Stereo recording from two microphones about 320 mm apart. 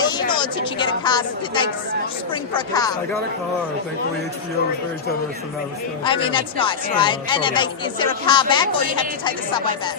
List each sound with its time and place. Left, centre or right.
0.0 s a woman's voice: centre
6.1 s speech: centre